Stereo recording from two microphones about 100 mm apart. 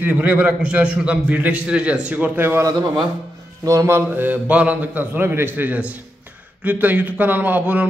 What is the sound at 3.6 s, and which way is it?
Speech, 35° right (ahead or behind).